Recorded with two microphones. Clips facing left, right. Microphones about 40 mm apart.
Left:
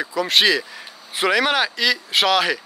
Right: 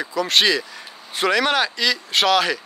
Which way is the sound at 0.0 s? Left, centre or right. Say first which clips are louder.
Left 1 dB; centre.